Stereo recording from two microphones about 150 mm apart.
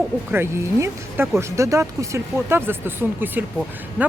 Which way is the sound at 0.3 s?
15° right (ahead or behind).